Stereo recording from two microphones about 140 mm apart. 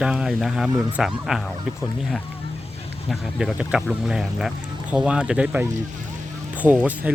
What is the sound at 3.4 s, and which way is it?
Speech, 5° right (ahead or behind).